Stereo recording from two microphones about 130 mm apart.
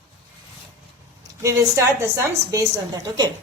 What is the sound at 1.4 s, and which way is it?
A woman's voice, 25° right (ahead or behind).